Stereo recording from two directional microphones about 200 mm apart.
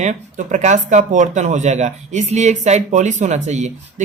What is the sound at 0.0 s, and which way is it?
Speech, 35° right (ahead or behind).